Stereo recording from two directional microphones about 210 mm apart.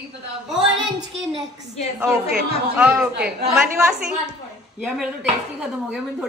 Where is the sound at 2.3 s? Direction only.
5° right (ahead or behind).